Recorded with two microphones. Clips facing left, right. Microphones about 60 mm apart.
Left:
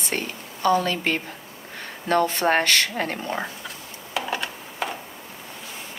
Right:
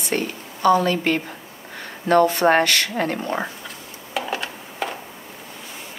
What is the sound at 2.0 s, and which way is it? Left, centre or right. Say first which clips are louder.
Speech: right 5 dB; right.